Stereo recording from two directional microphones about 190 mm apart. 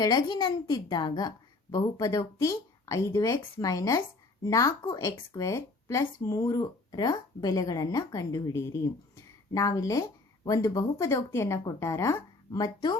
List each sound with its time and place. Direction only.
0.0 s a woman's voice: 20° left (ahead or behind)